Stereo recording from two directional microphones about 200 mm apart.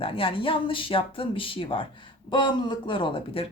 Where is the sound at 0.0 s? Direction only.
25° left (ahead or behind).